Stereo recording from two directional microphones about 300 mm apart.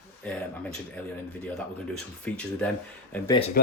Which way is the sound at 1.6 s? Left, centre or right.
Centre.